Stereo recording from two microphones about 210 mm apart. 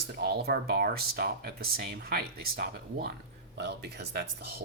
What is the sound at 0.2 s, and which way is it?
Speech, 50° right (ahead or behind).